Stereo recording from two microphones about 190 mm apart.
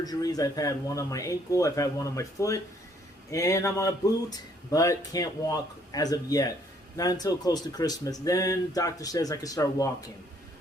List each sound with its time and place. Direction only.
0.0 s speech: 20° left (ahead or behind)